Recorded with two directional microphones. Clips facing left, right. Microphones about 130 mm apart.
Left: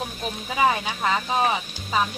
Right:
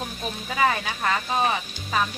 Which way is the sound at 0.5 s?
15° left (ahead or behind).